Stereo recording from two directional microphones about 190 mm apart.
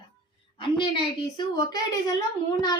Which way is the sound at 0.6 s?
25° left (ahead or behind).